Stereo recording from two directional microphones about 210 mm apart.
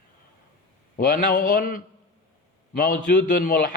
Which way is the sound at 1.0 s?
40° left (ahead or behind).